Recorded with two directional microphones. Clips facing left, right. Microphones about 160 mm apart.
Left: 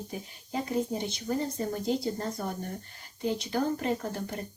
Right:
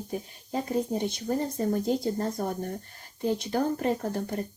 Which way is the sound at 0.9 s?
45° right (ahead or behind).